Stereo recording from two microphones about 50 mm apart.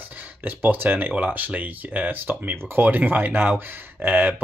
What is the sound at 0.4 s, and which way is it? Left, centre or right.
Speech, right.